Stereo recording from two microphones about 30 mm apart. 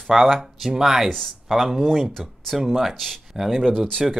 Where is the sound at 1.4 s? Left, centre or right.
Centre.